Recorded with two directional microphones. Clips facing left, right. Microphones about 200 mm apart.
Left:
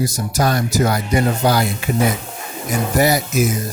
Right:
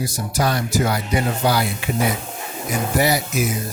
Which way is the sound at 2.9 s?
45° left (ahead or behind).